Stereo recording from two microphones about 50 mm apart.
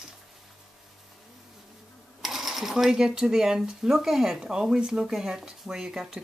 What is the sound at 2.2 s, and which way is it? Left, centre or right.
Speech, centre.